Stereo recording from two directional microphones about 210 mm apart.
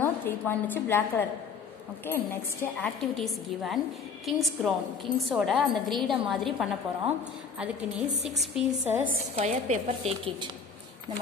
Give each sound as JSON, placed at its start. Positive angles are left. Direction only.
{"t": 0.0, "sound": "a woman's voice", "side_deg": 10}
{"t": 9.3, "sound": "a woman's voice", "side_deg": -35}